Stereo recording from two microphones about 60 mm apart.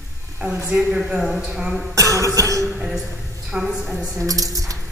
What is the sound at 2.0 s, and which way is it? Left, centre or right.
Music, right.